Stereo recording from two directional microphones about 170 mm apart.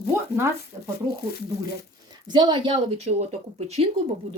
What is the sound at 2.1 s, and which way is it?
Speech, 25° right (ahead or behind).